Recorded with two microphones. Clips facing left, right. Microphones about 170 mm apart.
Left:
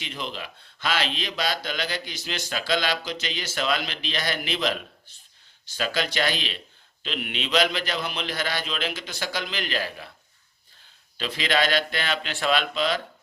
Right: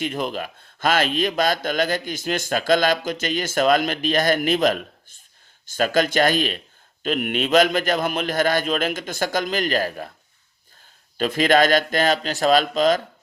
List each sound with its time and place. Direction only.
0.0 s a man's voice: 50° right (ahead or behind)
11.2 s a man's voice: 50° right (ahead or behind)